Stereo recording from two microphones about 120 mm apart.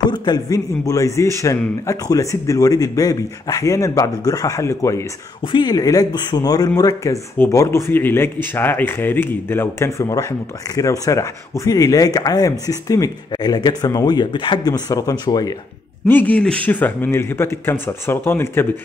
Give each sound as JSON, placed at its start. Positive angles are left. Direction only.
{"t": 0.1, "sound": "a man's voice", "side_deg": 35}
{"t": 5.5, "sound": "a man's voice", "side_deg": 35}
{"t": 16.1, "sound": "a man's voice", "side_deg": 15}